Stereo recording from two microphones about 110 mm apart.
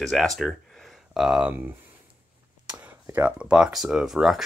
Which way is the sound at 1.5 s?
15° right (ahead or behind).